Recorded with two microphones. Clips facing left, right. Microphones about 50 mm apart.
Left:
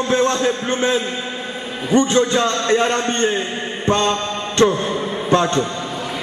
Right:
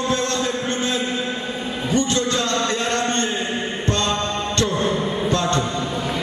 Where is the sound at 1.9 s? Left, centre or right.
Left.